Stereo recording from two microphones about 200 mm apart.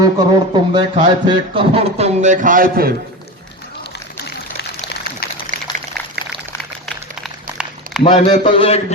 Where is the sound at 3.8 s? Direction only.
55° left (ahead or behind).